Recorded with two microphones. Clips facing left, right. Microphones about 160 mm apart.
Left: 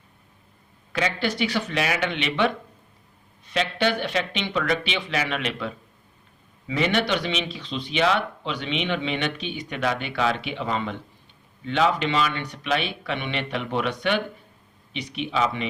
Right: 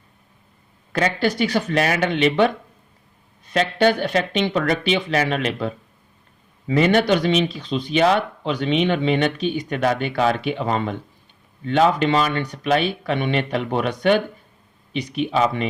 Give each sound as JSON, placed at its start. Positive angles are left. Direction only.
{"t": 0.9, "sound": "speech", "side_deg": -45}
{"t": 3.5, "sound": "speech", "side_deg": -45}